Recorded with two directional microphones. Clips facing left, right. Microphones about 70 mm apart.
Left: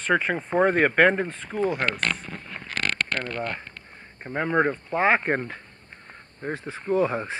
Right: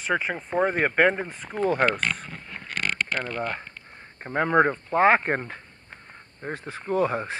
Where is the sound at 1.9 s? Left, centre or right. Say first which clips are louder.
Left 1 dB; centre.